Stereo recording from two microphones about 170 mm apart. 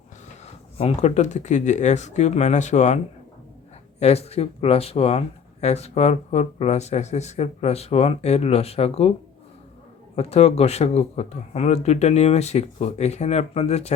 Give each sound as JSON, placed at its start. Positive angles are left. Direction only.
{"t": 0.8, "sound": "speech", "side_deg": 40}
{"t": 4.0, "sound": "speech", "side_deg": 40}
{"t": 10.2, "sound": "speech", "side_deg": 40}